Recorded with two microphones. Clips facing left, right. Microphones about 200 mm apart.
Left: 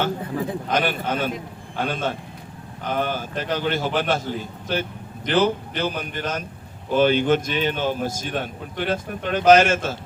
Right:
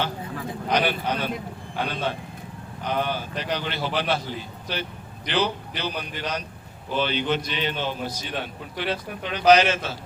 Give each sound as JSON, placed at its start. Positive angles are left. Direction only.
{"t": 0.7, "sound": "a man's voice", "side_deg": 50}